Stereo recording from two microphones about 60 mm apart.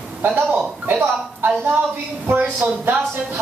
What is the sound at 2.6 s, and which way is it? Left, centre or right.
Speech, right.